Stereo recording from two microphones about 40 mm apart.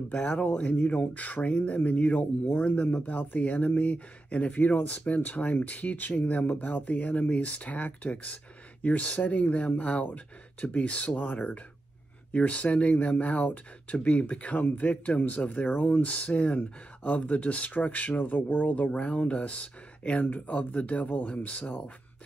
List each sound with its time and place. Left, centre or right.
0.6 s speech: left
18.9 s speech: left